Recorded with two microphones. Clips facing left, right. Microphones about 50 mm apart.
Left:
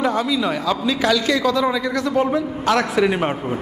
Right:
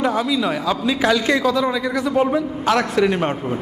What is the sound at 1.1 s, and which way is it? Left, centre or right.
Speech, right.